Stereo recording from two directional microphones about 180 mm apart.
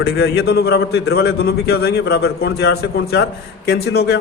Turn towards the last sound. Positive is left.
turn(degrees=65)  # may be behind; listen again after turning